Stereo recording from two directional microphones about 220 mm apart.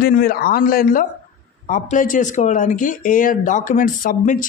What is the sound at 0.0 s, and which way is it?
Speech, 45° left (ahead or behind).